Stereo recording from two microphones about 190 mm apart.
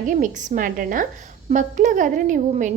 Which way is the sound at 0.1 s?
40° right (ahead or behind).